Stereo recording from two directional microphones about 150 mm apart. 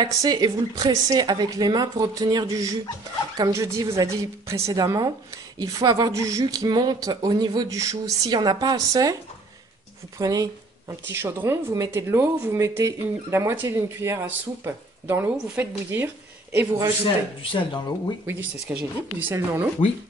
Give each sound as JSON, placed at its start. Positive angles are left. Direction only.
{"t": 0.0, "sound": "speech", "side_deg": -25}
{"t": 10.1, "sound": "speech", "side_deg": -25}
{"t": 17.4, "sound": "speech", "side_deg": 35}
{"t": 18.2, "sound": "speech", "side_deg": -15}